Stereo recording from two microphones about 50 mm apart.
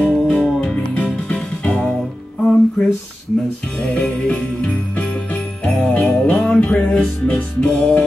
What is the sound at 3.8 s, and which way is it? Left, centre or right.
Jingle bell, left.